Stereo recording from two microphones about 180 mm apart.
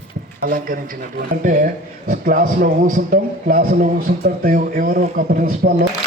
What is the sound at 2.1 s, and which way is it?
Speech, 50° right (ahead or behind).